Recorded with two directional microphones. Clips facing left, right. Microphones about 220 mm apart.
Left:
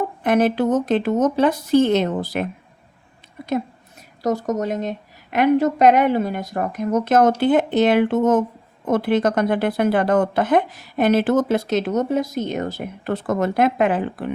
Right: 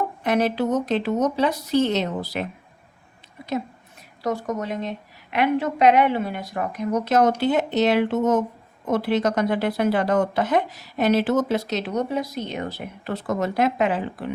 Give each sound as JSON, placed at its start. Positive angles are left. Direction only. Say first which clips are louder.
{"t": 0.2, "sound": "speech", "louder": "left 4 dB", "side_deg": 50}
{"t": 4.2, "sound": "speech", "louder": "left 5 dB", "side_deg": 40}